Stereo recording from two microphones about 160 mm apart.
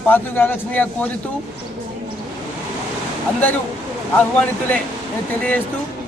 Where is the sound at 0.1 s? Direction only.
10° left (ahead or behind).